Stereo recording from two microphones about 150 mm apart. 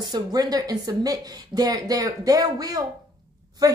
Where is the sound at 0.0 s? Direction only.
25° right (ahead or behind).